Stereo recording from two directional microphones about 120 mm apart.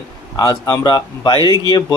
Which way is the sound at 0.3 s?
35° left (ahead or behind).